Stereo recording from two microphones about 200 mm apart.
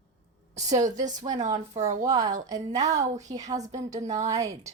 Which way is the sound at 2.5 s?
35° right (ahead or behind).